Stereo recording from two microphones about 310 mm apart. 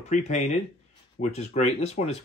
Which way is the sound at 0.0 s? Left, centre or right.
Left.